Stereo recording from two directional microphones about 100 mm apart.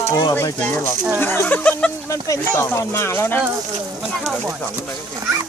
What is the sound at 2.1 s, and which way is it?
Speech, 35° left (ahead or behind).